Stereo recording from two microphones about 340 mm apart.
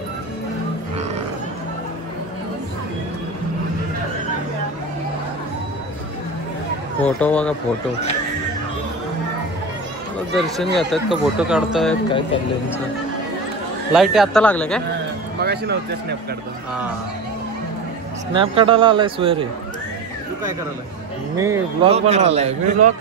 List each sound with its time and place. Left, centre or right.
7.0 s speech: centre
10.3 s speech: centre
13.9 s speech: centre
15.3 s a man's voice: right
18.3 s speech: centre
21.4 s a man's voice: centre